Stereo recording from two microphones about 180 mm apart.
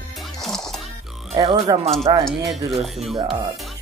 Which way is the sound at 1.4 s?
25° right (ahead or behind).